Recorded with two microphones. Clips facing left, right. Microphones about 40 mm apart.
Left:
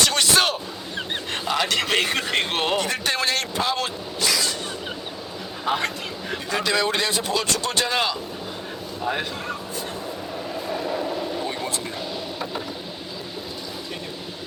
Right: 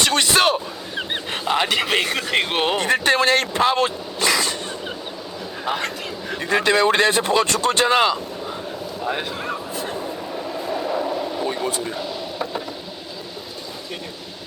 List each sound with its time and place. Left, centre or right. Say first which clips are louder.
0.0 s a man's voice: right 3 dB; right
0.9 s a sound: right 2 dB; centre
2.0 s speech: right 1 dB; centre
2.3 s speech: right 6 dB; centre
2.7 s speech: right 6 dB; right
5.6 s speech: left 1 dB; centre
6.5 s speech: right 6 dB; right
9.0 s speech: right 1 dB; centre
9.5 s a sound: right 3 dB; centre
10.7 s vehicle: right 3 dB; centre